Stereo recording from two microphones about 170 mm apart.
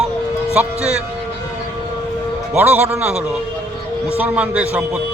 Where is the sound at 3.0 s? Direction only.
40° right (ahead or behind).